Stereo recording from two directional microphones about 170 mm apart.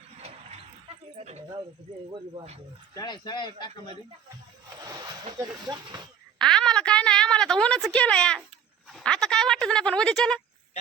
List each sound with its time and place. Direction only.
0.2 s dog: 35° right (ahead or behind)
1.1 s a sound: 40° right (ahead or behind)
2.3 s speech: 35° right (ahead or behind)
2.9 s speech: 25° left (ahead or behind)
4.9 s speech: 25° right (ahead or behind)
6.4 s a sound: 5° left (ahead or behind)